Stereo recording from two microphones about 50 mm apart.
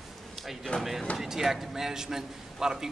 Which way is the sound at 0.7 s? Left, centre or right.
Left.